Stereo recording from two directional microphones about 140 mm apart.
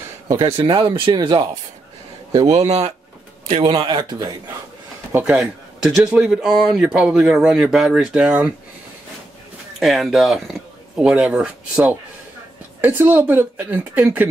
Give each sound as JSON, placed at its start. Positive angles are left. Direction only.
{"t": 0.7, "sound": "speech", "side_deg": -35}
{"t": 2.6, "sound": "speech", "side_deg": -50}
{"t": 3.4, "sound": "a man's voice", "side_deg": -40}
{"t": 5.1, "sound": "a man's voice", "side_deg": -10}
{"t": 9.8, "sound": "speech", "side_deg": 0}